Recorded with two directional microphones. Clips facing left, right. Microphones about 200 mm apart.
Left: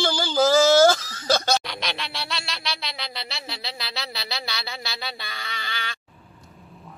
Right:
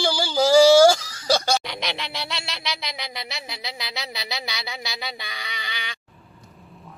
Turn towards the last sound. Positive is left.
turn(degrees=-15)  # may be behind; listen again after turning